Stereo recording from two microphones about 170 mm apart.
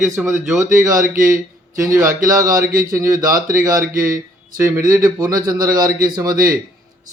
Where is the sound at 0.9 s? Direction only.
55° right (ahead or behind).